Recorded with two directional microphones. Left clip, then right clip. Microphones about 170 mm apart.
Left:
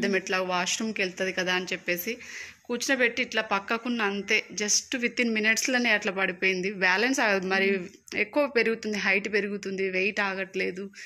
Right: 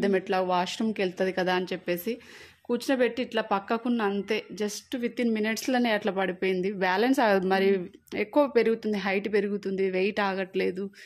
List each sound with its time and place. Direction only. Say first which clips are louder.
0.0 s speech: right 1 dB; 35° right (ahead or behind)
4.9 s speech: left 2 dB; 20° right (ahead or behind); by 10.8 s 35° right (ahead or behind)